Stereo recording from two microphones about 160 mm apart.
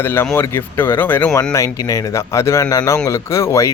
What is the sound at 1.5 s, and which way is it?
Speech, 20° left (ahead or behind).